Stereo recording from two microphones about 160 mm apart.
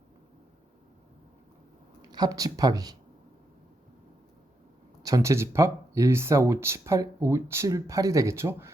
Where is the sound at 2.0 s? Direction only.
25° right (ahead or behind).